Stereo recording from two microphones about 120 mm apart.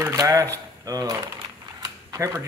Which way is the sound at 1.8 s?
25° right (ahead or behind).